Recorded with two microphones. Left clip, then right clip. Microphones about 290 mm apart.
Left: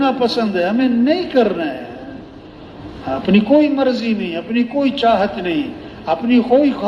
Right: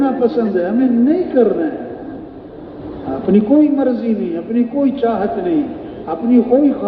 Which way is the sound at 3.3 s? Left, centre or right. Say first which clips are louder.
Right 1 dB; left.